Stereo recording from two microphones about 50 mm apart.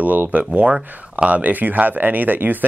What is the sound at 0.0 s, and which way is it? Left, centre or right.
Speech, right.